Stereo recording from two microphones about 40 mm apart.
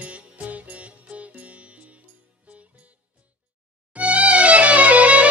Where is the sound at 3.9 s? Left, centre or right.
Right.